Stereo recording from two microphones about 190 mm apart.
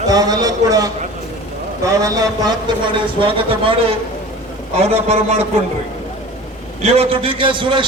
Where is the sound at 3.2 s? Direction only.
30° right (ahead or behind).